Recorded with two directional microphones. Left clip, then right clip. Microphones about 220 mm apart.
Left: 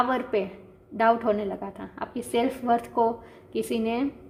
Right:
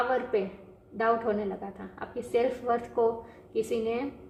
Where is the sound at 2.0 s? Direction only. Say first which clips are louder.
Left 1 dB; 50° left (ahead or behind).